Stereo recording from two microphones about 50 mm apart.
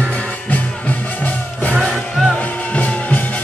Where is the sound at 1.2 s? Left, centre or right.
Left.